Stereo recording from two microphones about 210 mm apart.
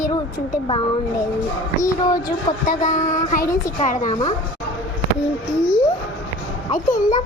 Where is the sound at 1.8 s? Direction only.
15° left (ahead or behind).